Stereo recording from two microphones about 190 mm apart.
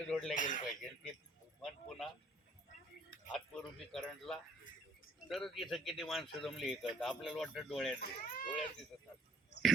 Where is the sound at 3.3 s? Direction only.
5° left (ahead or behind).